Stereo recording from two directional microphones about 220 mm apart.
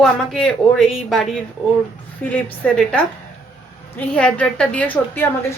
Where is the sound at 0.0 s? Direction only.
Centre (ahead or behind).